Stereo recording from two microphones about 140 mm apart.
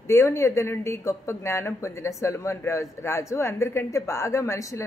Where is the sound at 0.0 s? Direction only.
20° left (ahead or behind).